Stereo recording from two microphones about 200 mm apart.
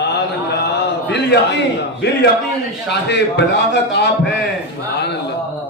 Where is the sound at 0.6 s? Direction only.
60° left (ahead or behind).